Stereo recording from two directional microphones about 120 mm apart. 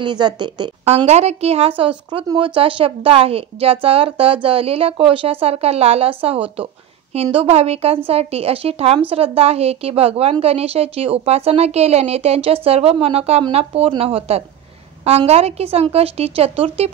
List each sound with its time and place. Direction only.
0.0 s speech: 40° right (ahead or behind)
0.8 s a woman's voice: 60° right (ahead or behind)
2.0 s a woman's voice: 40° right (ahead or behind); by 16.9 s 55° right (ahead or behind)